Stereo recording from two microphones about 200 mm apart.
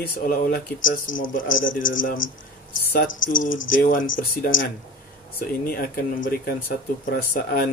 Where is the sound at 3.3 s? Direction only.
40° left (ahead or behind).